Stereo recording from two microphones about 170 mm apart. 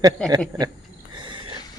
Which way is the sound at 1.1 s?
30° right (ahead or behind).